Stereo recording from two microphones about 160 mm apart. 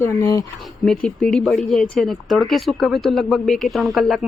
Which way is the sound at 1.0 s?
5° left (ahead or behind).